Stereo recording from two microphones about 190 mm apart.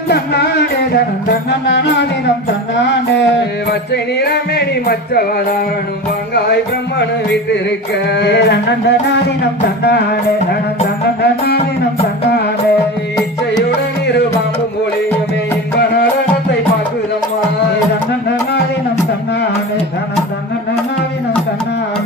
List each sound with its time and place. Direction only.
0.9 s music: 60° left (ahead or behind)
8.0 s music: 65° left (ahead or behind)